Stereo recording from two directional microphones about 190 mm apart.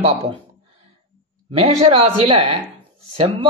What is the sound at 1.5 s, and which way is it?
Speech, 30° right (ahead or behind).